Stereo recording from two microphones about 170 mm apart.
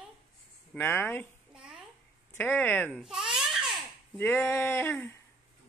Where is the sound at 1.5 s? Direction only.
5° right (ahead or behind).